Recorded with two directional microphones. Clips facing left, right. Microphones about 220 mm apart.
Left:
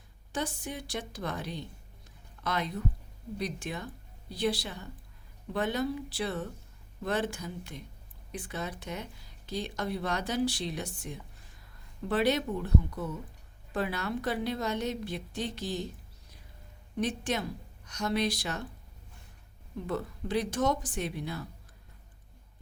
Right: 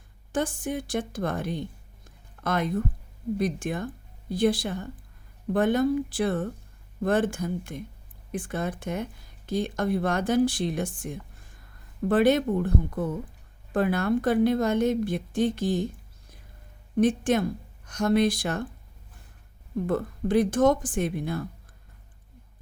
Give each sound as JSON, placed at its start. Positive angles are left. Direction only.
{"t": 0.3, "sound": "speech", "side_deg": -50}
{"t": 2.0, "sound": "a sound", "side_deg": -50}
{"t": 3.3, "sound": "speech", "side_deg": -50}
{"t": 17.0, "sound": "speech", "side_deg": -50}
{"t": 19.7, "sound": "speech", "side_deg": -50}